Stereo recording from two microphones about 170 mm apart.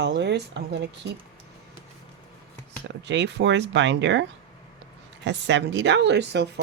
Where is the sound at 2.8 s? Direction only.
90° right.